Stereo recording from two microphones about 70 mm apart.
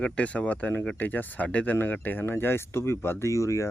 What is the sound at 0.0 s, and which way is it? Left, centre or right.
Speech, centre.